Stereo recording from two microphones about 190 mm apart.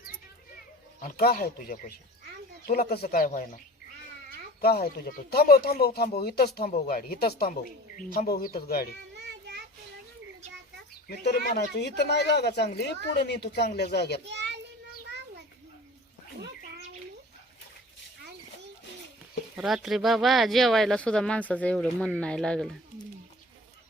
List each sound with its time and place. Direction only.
1.0 s speech: 55° left (ahead or behind)
4.6 s speech: 55° left (ahead or behind)
9.1 s child singing: 65° right (ahead or behind)
11.1 s speech: 60° left (ahead or behind)
14.3 s children playing: 65° right (ahead or behind)
19.5 s speech: centre (ahead or behind)